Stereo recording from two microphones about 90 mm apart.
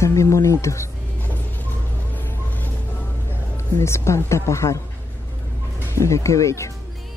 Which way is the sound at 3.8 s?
30° left (ahead or behind).